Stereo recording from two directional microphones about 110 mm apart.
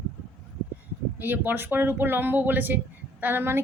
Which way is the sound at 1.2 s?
20° right (ahead or behind).